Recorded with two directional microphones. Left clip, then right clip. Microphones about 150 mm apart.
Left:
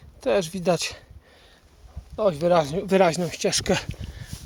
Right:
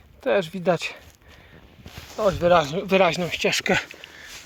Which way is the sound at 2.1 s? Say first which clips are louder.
Right 2 dB; 15° left (ahead or behind).